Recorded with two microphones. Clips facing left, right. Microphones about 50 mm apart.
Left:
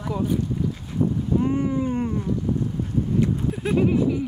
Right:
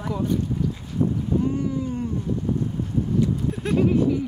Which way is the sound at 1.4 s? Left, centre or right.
Left.